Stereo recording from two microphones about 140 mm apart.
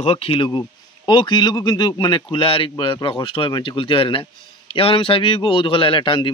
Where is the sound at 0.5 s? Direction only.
30° left (ahead or behind).